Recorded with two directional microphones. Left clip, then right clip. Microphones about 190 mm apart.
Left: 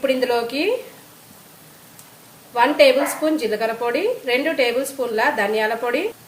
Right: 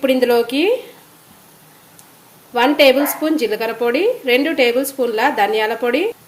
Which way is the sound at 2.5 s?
50° right (ahead or behind).